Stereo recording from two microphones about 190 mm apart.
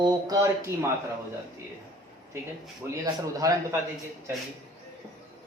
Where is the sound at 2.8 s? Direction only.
15° right (ahead or behind).